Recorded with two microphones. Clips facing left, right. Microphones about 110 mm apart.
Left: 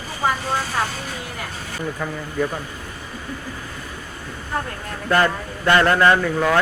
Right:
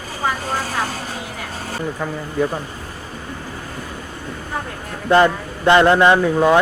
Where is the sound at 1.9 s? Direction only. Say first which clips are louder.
Right 3 dB; 15° right (ahead or behind).